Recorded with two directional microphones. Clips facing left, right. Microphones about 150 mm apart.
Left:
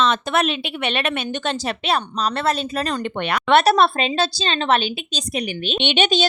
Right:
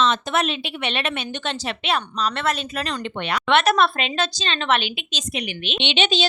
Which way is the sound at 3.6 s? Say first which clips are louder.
Left 3 dB; 35° left (ahead or behind).